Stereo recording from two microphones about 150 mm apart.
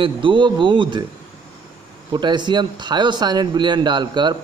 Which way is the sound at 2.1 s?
30° right (ahead or behind).